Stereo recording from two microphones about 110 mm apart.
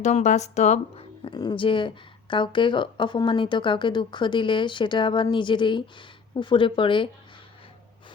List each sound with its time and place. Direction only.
0.0 s speech: 90° left
1.2 s speech: 40° left (ahead or behind)